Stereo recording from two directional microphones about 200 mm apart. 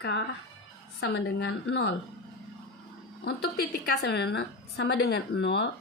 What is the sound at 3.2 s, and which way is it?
A woman's voice, 50° left (ahead or behind).